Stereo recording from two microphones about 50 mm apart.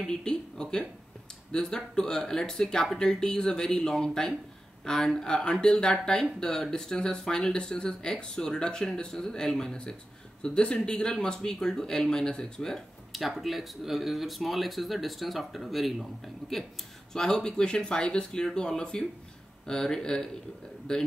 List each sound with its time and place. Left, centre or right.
0.0 s speech: centre
13.4 s speech: centre